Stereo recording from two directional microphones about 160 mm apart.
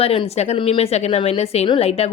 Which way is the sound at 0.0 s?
40° left (ahead or behind).